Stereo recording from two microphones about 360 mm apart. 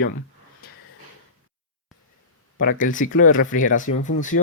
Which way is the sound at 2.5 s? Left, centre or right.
Left.